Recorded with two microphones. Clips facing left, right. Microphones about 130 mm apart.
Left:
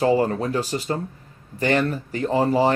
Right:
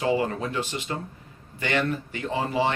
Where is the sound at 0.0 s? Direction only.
40° left (ahead or behind).